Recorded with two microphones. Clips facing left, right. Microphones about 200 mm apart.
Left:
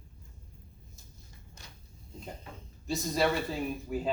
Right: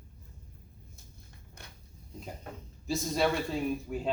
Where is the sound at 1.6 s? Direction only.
55° right (ahead or behind).